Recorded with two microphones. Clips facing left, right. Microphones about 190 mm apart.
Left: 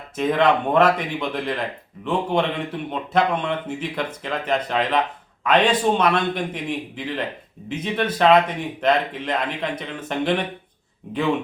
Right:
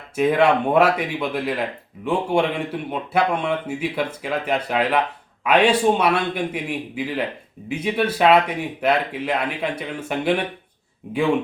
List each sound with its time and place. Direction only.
0.2 s a man's voice: 10° right (ahead or behind)